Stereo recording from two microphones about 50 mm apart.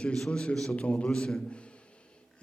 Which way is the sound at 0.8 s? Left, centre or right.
Left.